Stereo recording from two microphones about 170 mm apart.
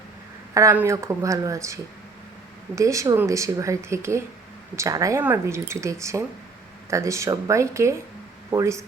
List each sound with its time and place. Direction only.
0.5 s speech: 15° right (ahead or behind)